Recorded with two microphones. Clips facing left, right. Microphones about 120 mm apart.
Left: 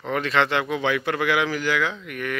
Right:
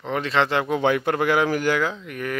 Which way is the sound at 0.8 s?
45° right (ahead or behind).